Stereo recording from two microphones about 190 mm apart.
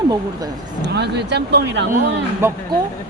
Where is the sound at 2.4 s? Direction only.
10° right (ahead or behind).